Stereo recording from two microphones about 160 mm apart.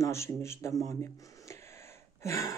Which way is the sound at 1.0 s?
15° left (ahead or behind).